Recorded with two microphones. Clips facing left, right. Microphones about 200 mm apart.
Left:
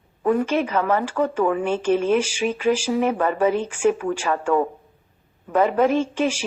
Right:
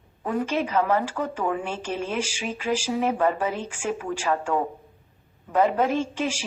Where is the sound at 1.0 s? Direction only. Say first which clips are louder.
Left 6 dB; 60° left (ahead or behind).